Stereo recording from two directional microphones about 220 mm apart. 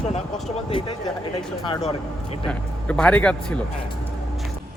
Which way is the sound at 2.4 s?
5° left (ahead or behind).